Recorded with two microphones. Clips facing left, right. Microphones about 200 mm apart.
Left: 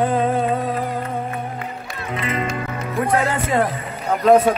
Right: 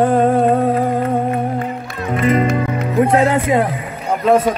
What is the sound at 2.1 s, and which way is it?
Music, 40° right (ahead or behind).